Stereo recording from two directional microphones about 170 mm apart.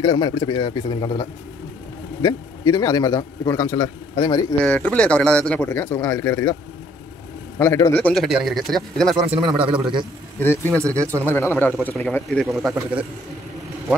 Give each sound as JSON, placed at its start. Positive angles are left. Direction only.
{"t": 0.0, "sound": "a man's voice", "side_deg": 20}
{"t": 2.2, "sound": "a man's voice", "side_deg": 20}
{"t": 4.6, "sound": "speech", "side_deg": 5}
{"t": 7.5, "sound": "a man's voice", "side_deg": 15}
{"t": 10.4, "sound": "speech", "side_deg": 10}
{"t": 10.8, "sound": "speech", "side_deg": -20}
{"t": 11.2, "sound": "a man's voice", "side_deg": 10}